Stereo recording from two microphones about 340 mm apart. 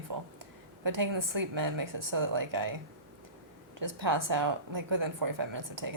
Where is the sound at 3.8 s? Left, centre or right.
Right.